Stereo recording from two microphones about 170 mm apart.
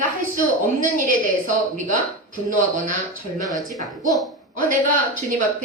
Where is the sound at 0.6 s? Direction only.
50° right (ahead or behind).